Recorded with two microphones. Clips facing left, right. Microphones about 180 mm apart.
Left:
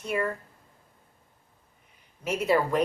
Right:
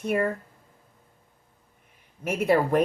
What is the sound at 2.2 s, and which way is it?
Speech, 55° right (ahead or behind).